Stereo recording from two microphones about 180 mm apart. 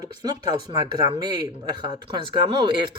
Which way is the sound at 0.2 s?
25° right (ahead or behind).